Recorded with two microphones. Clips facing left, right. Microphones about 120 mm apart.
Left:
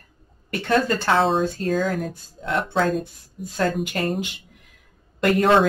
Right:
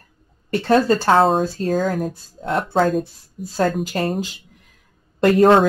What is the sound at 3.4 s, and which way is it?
Speech, 35° right (ahead or behind).